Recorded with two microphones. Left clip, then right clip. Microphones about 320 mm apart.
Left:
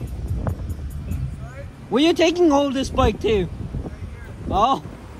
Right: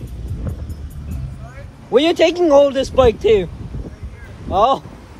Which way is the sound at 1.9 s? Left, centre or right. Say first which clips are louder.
Right 4 dB; centre.